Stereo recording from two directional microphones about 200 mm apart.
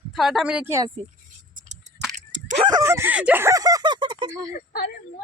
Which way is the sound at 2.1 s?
35° right (ahead or behind).